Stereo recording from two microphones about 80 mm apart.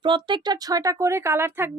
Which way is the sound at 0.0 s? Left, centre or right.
Right.